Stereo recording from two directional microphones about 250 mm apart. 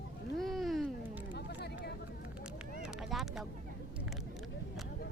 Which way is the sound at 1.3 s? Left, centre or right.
Left.